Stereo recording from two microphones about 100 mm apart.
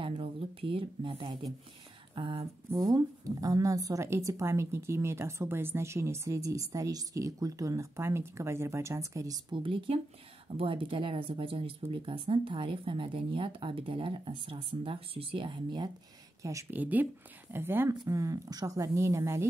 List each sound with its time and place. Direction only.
0.0 s speech: 65° right (ahead or behind)
2.7 s a woman's voice: 40° right (ahead or behind)
9.5 s speech: 60° right (ahead or behind)
16.7 s speech: 15° right (ahead or behind)
18.0 s a woman's voice: 35° right (ahead or behind)